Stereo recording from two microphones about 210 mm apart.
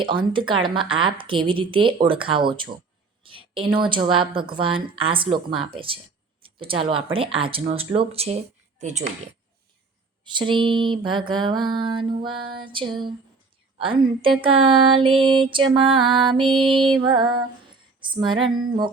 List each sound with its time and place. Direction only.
0.0 s music: 25° right (ahead or behind)
3.2 s a sound: 25° right (ahead or behind)
3.8 s music: 25° right (ahead or behind)
8.8 s speech: 35° right (ahead or behind)
10.2 s music: 25° right (ahead or behind)